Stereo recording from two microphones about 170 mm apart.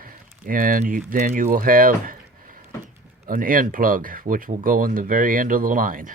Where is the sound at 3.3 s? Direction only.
55° right (ahead or behind).